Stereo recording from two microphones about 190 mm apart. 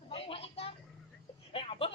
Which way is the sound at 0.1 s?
30° left (ahead or behind).